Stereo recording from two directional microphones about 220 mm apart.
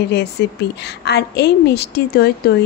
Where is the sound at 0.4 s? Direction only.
50° left (ahead or behind).